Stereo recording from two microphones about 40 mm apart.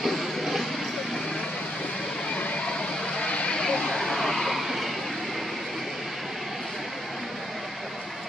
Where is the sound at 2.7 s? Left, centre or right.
Centre.